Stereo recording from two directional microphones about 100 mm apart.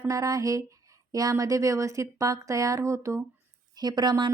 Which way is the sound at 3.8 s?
45° right (ahead or behind).